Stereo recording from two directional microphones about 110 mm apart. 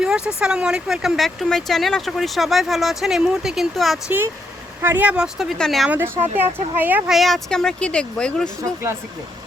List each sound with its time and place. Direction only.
0.0 s speech: 5° right (ahead or behind)
4.8 s speech: 20° right (ahead or behind); by 5.9 s 5° left (ahead or behind)
5.9 s speech: 15° right (ahead or behind)
7.1 s speech: centre (ahead or behind)